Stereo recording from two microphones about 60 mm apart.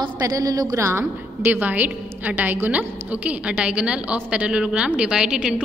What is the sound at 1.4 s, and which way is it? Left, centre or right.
A woman's voice, right.